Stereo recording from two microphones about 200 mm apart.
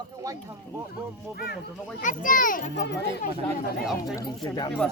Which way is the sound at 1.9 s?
40° left (ahead or behind).